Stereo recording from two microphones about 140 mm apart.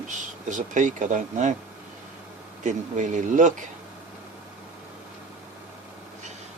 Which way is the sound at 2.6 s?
65° right (ahead or behind).